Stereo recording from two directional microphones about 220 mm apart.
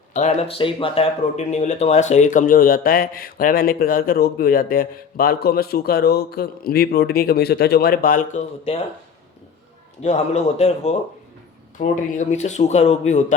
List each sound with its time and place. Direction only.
0.1 s speech: 35° left (ahead or behind)
10.0 s speech: 30° left (ahead or behind)